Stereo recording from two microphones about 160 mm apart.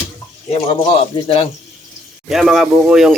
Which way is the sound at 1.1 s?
35° left (ahead or behind).